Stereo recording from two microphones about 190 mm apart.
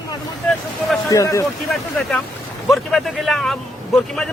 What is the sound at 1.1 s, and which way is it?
Speech, 15° left (ahead or behind).